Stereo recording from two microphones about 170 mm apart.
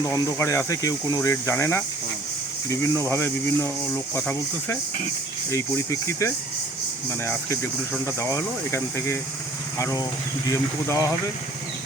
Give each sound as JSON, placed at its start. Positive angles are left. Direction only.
{"t": 0.1, "sound": "speech", "side_deg": 15}